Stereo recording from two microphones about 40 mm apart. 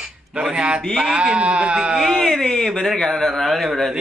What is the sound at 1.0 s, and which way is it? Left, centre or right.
Speech, right.